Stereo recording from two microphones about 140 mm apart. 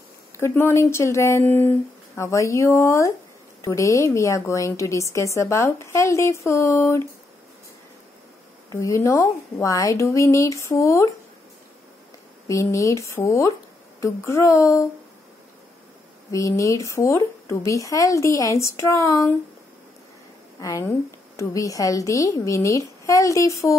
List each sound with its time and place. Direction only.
0.4 s a woman's voice: 15° left (ahead or behind)
8.7 s a woman's voice: 20° left (ahead or behind)
12.4 s a woman's voice: 20° left (ahead or behind)
16.3 s a woman's voice: 25° left (ahead or behind)
20.6 s a woman's voice: 20° left (ahead or behind)